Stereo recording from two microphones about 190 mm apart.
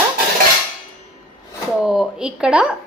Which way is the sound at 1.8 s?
5° right (ahead or behind).